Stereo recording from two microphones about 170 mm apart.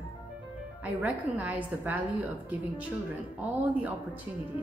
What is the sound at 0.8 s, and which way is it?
A woman's voice, 10° right (ahead or behind).